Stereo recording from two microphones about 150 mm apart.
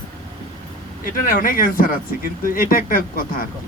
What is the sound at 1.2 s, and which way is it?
Speech, 65° left (ahead or behind).